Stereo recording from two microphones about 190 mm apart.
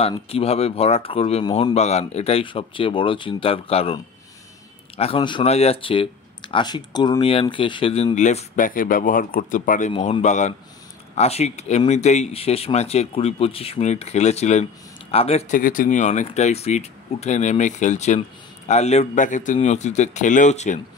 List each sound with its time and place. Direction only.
0.0 s speech: 30° left (ahead or behind)